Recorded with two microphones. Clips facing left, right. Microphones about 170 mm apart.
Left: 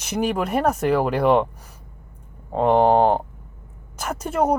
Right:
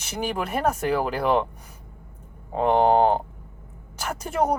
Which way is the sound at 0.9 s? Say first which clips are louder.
Left 6 dB; centre (ahead or behind).